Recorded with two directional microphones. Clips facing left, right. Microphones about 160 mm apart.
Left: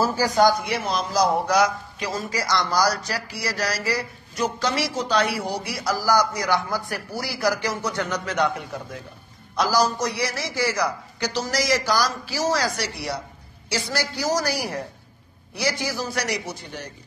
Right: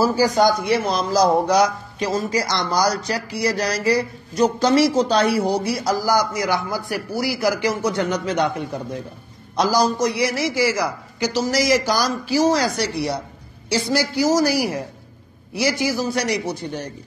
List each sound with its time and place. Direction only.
0.0 s a man's voice: 15° right (ahead or behind)
0.7 s speech: 40° right (ahead or behind)
1.5 s speech: 25° right (ahead or behind)
4.4 s speech: 40° right (ahead or behind)
5.1 s speech: 30° right (ahead or behind)
6.1 s a man's voice: 10° right (ahead or behind)
7.1 s speech: 20° right (ahead or behind)
9.9 s a man's voice: 15° right (ahead or behind)
13.8 s a man's voice: 10° right (ahead or behind)
16.2 s speech: 30° right (ahead or behind)